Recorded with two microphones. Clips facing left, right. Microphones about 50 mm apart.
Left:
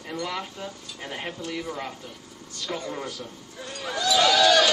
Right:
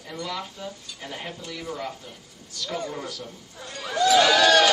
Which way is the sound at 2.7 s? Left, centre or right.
Centre.